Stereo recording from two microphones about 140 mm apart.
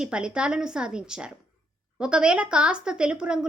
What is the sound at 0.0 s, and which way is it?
A woman's voice, 5° right (ahead or behind).